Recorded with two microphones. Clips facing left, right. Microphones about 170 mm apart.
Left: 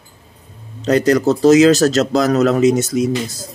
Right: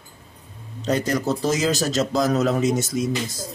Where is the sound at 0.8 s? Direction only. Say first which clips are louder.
Left 9 dB; 80° left.